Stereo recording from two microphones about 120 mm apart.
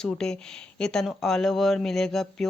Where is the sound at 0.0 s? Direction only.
5° left (ahead or behind).